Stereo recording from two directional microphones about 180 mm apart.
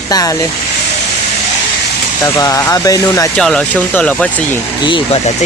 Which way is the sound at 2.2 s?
20° left (ahead or behind).